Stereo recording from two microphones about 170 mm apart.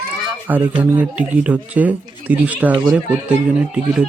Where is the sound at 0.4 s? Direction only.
10° right (ahead or behind).